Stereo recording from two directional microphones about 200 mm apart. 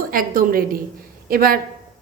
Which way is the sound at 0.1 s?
45° right (ahead or behind).